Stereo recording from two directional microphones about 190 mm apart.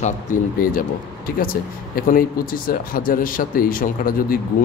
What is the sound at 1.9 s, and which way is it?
Speech, 50° left (ahead or behind).